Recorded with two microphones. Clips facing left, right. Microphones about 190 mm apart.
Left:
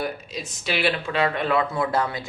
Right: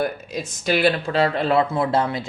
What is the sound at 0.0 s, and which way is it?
Speech, 50° right (ahead or behind).